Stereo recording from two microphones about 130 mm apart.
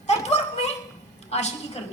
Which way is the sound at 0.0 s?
55° left (ahead or behind).